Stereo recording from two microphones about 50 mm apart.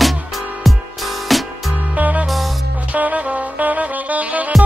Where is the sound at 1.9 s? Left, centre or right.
Right.